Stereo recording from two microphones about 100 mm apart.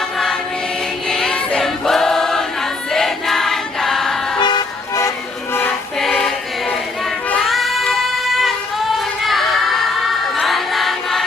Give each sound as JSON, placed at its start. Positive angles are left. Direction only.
{"t": 1.1, "sound": "choir", "side_deg": 5}
{"t": 4.4, "sound": "vehicle", "side_deg": 45}
{"t": 6.0, "sound": "choir", "side_deg": 5}
{"t": 7.3, "sound": "child singing", "side_deg": 0}
{"t": 10.3, "sound": "choir", "side_deg": 0}